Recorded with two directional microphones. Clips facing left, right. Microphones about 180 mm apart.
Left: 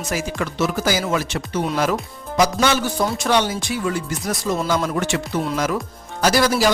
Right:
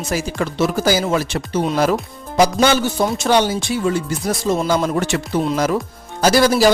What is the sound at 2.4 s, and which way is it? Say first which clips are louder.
Music: right 4 dB; 30° right (ahead or behind).